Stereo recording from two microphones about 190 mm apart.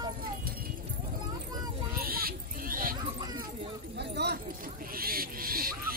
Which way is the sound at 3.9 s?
60° right (ahead or behind).